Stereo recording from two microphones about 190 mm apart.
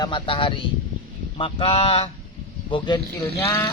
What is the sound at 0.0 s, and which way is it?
A man's voice, 25° left (ahead or behind).